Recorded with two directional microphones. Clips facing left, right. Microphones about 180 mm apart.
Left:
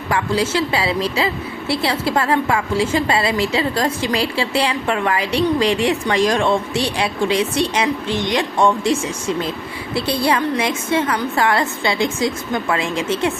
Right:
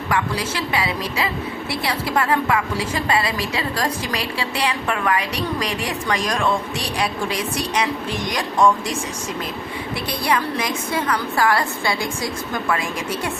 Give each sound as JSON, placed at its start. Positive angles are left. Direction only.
{"t": 0.1, "sound": "a woman's voice", "side_deg": 25}